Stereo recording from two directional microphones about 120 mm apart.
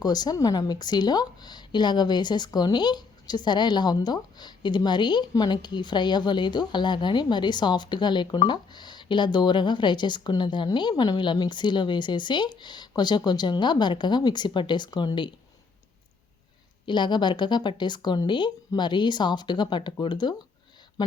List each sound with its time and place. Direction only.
0.0 s a woman's voice: 35° left (ahead or behind)
16.8 s a woman's voice: 40° left (ahead or behind)